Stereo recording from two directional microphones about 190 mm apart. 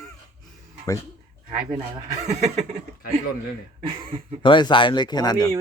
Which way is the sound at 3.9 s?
25° right (ahead or behind).